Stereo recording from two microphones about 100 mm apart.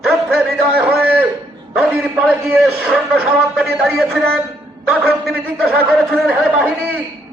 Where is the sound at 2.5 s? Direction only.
5° right (ahead or behind).